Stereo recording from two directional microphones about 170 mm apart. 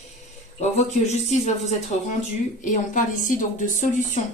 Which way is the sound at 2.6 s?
50° left (ahead or behind).